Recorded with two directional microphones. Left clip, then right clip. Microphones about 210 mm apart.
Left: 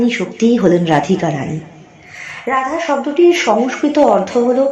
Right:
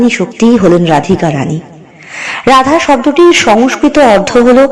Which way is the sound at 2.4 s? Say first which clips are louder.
Right 10 dB; 40° right (ahead or behind).